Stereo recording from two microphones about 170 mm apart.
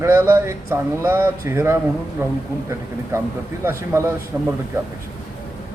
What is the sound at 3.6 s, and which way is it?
Speech, 15° right (ahead or behind).